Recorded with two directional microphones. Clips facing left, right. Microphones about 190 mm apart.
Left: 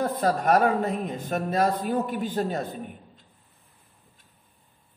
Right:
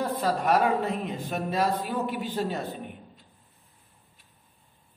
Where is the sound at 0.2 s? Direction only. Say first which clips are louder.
Left 3 dB; 45° left (ahead or behind).